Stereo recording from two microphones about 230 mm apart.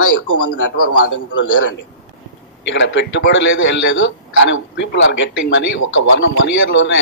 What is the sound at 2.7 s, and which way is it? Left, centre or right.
A man's voice, left.